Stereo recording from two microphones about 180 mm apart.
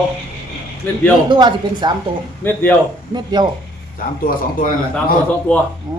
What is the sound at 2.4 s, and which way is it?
Speech, 10° left (ahead or behind).